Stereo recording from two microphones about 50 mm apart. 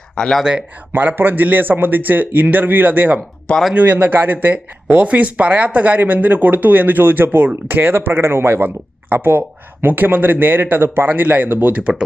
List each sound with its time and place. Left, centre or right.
0.2 s speech: centre
0.9 s speech: right
8.5 s speech: right
11.1 s speech: right
11.7 s speech: right